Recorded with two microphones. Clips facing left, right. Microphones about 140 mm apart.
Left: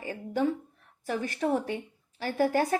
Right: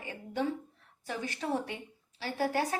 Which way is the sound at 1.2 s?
60° left (ahead or behind).